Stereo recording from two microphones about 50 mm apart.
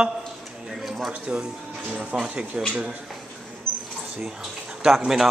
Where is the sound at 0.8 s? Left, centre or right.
Centre.